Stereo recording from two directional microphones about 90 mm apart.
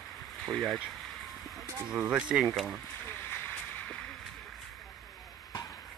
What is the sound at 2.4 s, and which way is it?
Speech, centre (ahead or behind).